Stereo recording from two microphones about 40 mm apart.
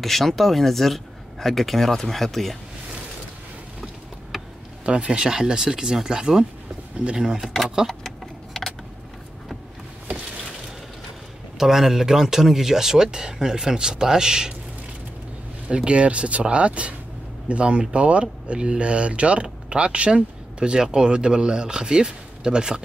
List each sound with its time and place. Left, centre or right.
0.0 s speech: centre
4.3 s a sound: centre
4.8 s speech: right
8.5 s vehicle: centre
11.5 s speech: centre
15.7 s speech: right